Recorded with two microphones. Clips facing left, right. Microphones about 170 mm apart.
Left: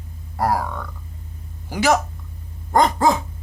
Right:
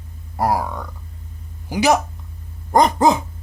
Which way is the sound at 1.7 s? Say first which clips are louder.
Right 2 dB; 15° right (ahead or behind).